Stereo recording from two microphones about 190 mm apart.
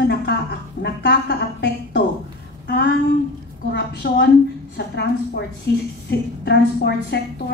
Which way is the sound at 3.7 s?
65° left (ahead or behind).